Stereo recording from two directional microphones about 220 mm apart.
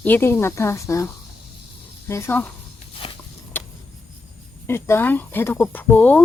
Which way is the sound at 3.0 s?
25° left (ahead or behind).